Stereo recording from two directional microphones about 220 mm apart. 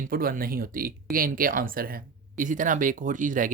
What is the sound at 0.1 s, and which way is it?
Speech, 40° right (ahead or behind).